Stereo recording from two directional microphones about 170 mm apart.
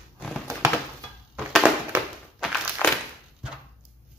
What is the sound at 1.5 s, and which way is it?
Crushing, 5° right (ahead or behind).